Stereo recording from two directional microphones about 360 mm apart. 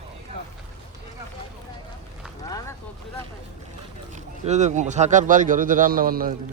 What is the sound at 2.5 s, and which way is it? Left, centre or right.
Vehicle, centre.